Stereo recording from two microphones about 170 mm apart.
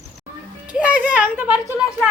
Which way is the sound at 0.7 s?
5° right (ahead or behind).